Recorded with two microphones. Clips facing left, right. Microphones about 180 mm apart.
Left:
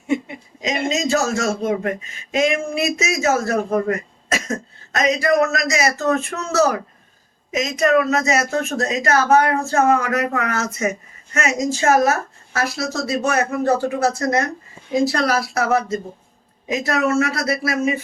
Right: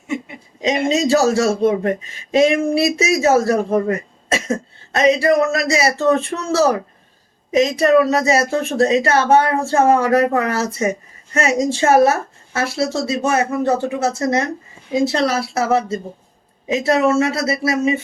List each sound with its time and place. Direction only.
0.6 s speech: 30° right (ahead or behind)